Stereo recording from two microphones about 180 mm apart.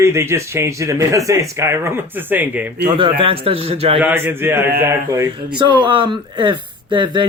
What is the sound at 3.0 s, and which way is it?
Speech, 30° right (ahead or behind).